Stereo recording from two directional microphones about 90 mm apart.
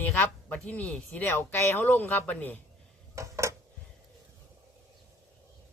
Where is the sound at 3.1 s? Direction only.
35° right (ahead or behind).